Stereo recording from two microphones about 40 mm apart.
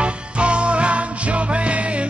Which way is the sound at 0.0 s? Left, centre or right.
Right.